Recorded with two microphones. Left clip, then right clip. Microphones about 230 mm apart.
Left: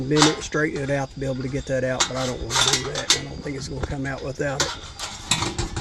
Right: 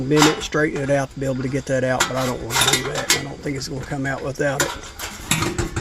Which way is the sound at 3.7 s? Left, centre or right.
Right.